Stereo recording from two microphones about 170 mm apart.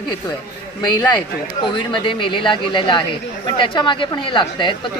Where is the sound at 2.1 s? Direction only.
30° left (ahead or behind).